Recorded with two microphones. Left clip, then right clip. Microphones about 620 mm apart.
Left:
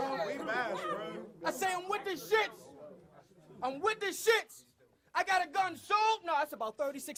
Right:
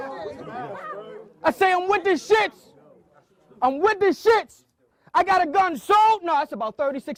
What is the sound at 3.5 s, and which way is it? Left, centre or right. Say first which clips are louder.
Speech: right 14 dB; right.